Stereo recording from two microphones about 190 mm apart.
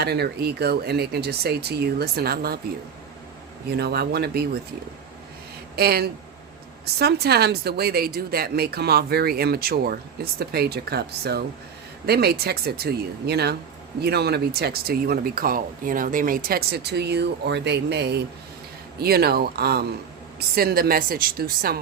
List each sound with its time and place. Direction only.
0.0 s speech: 60° right (ahead or behind)
3.8 s speech: 60° right (ahead or behind)
5.7 s speech: 55° right (ahead or behind)